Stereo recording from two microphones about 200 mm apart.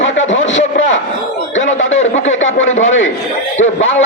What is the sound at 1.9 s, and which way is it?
Speech, 35° left (ahead or behind).